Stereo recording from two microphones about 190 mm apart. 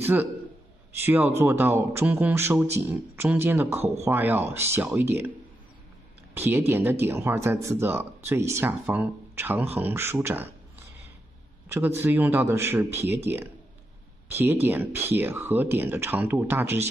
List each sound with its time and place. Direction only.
0.0 s a man's voice: 10° right (ahead or behind)
6.3 s speech: 10° right (ahead or behind)
11.7 s speech: 10° right (ahead or behind)